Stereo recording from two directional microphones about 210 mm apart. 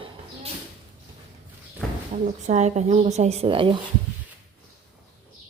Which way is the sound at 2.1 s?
35° right (ahead or behind).